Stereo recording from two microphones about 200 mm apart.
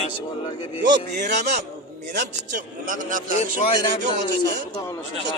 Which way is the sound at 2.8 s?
40° right (ahead or behind).